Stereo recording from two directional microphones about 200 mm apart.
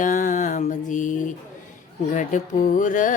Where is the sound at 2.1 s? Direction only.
40° left (ahead or behind).